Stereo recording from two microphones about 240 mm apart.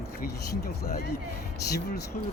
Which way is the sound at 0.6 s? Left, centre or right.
Left.